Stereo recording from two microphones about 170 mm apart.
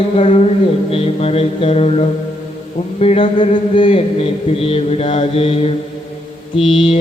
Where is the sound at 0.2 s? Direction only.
40° left (ahead or behind).